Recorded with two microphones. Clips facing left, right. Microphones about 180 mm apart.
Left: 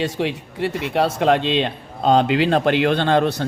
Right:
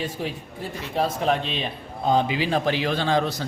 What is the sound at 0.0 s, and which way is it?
A man's voice, 80° left.